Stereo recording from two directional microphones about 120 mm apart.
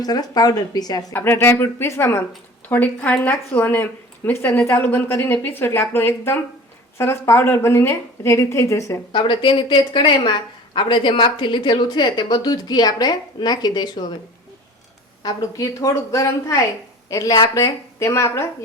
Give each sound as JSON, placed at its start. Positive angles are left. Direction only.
{"t": 0.0, "sound": "a woman's voice", "side_deg": 35}
{"t": 1.1, "sound": "a woman's voice", "side_deg": 15}
{"t": 9.1, "sound": "a woman's voice", "side_deg": 45}
{"t": 15.2, "sound": "a woman's voice", "side_deg": 30}